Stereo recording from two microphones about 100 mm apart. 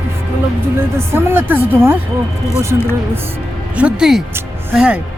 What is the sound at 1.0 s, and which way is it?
Speech, 25° right (ahead or behind).